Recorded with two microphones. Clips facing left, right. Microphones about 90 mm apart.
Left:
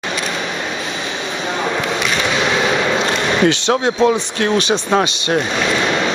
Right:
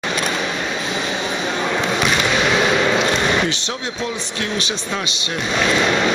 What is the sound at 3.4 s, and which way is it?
Speech, 75° left (ahead or behind).